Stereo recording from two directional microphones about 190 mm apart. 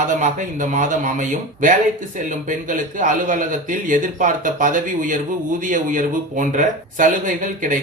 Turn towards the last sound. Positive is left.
turn(degrees=-45)  # may be behind; listen again after turning